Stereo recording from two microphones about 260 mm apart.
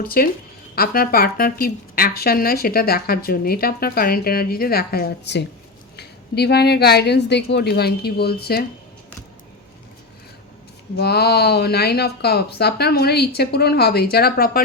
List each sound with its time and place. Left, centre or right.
0.0 s a woman's voice: left
10.9 s a woman's voice: left